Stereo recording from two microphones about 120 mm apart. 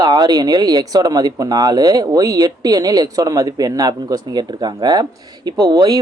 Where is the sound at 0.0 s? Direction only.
35° right (ahead or behind).